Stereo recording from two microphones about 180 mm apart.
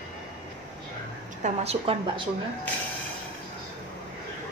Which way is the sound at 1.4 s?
35° right (ahead or behind).